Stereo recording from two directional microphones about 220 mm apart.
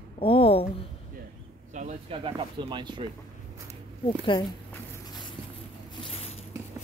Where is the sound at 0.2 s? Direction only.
25° left (ahead or behind).